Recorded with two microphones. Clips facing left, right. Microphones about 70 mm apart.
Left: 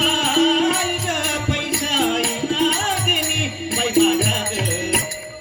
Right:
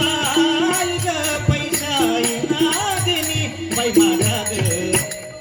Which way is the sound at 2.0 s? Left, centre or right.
Centre.